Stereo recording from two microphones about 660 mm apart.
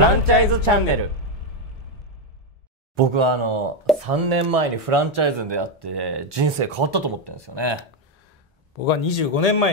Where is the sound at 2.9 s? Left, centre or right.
Right.